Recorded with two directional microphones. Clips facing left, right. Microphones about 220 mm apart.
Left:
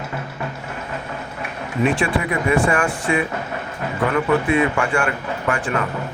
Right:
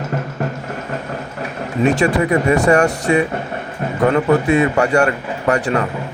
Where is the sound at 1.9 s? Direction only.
40° right (ahead or behind).